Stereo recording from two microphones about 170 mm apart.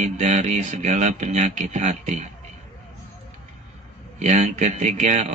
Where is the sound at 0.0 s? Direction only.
45° right (ahead or behind).